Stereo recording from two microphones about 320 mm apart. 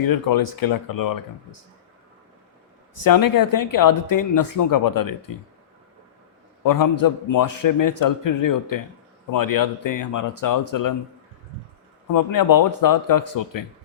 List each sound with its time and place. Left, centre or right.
0.0 s speech: left
3.0 s speech: left
6.6 s a man's voice: left
9.3 s a man's voice: left
12.1 s speech: left